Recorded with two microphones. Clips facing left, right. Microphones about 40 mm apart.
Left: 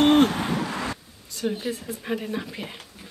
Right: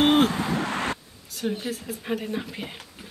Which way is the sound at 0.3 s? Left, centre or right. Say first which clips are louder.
Even; left.